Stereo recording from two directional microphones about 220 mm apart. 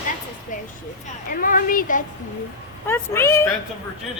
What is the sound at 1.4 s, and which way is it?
Speech, 40° left (ahead or behind).